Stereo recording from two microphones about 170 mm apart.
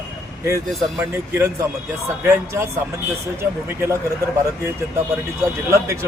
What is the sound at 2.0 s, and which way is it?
Speech, 15° right (ahead or behind).